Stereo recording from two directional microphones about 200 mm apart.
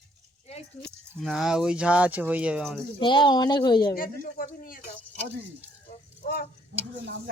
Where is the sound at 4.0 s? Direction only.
45° left (ahead or behind).